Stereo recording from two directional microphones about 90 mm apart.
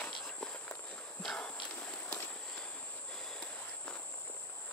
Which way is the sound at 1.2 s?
10° left (ahead or behind).